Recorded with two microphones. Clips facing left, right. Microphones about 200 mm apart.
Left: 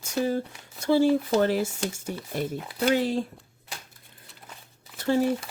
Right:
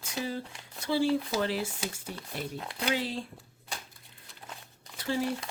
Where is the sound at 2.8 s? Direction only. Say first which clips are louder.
Left 8 dB; 45° left (ahead or behind).